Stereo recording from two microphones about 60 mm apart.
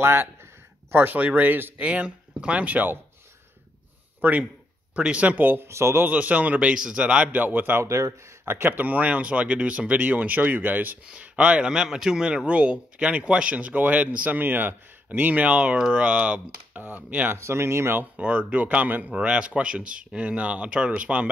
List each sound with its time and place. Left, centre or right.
0.0 s speech: right
0.9 s speech: right
4.2 s speech: right
5.7 s speech: right
6.0 s speech: right
7.3 s speech: right
7.8 s speech: right
8.5 s speech: right
8.8 s speech: right
11.7 s speech: centre; by 17.4 s right
17.4 s speech: right
18.1 s speech: right